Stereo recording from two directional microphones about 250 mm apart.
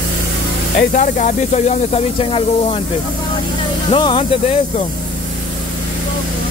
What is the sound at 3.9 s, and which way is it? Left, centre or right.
Speech, centre.